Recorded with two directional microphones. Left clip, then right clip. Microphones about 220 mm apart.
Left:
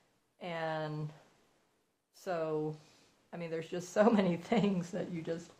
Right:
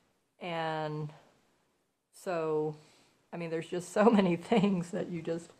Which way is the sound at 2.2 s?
40° right (ahead or behind).